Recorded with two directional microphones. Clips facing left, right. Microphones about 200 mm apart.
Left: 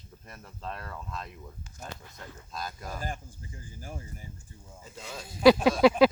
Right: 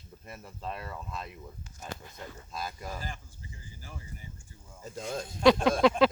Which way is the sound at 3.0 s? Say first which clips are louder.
Left 5 dB; 50° left (ahead or behind).